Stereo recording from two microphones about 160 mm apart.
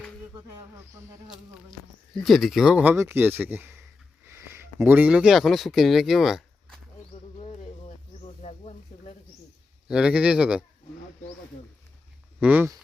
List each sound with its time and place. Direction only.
2.2 s speech: centre (ahead or behind)
7.3 s insect: 40° left (ahead or behind)
8.4 s a sound: 40° left (ahead or behind)
9.9 s speech: 5° right (ahead or behind)
12.4 s speech: 10° right (ahead or behind)